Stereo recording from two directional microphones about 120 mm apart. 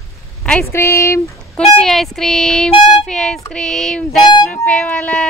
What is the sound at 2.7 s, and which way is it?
Speech, 45° left (ahead or behind).